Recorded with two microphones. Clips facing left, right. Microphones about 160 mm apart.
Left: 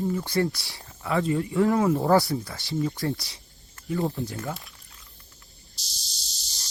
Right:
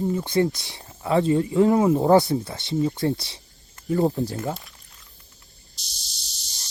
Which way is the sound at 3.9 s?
40° right (ahead or behind).